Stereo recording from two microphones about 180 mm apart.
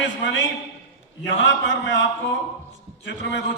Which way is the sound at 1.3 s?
90° left.